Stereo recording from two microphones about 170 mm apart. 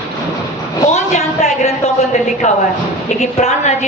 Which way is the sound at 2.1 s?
40° left (ahead or behind).